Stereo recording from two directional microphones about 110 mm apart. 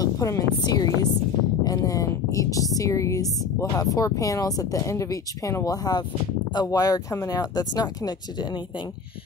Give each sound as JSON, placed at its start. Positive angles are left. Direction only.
{"t": 0.0, "sound": "a woman's voice", "side_deg": 35}